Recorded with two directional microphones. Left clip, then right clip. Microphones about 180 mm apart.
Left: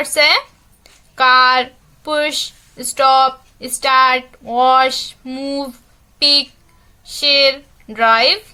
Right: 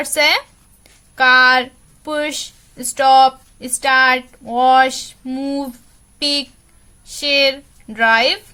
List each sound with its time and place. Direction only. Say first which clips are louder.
0.0 s a woman's voice: left 2 dB; 15° right (ahead or behind)
1.1 s a sound: even; 15° right (ahead or behind)
2.7 s a woman's voice: right 1 dB; 20° right (ahead or behind)